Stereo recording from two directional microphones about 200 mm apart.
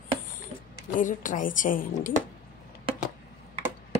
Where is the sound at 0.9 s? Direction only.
40° left (ahead or behind).